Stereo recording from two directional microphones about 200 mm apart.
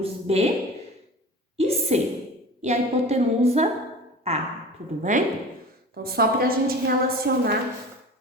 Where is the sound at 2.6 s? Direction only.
35° right (ahead or behind).